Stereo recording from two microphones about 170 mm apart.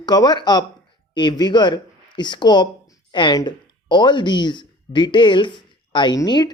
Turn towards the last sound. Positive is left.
turn(degrees=25)  # may be behind; listen again after turning